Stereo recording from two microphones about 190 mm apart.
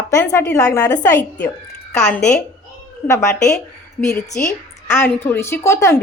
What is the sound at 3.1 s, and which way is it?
A woman's voice, 15° left (ahead or behind).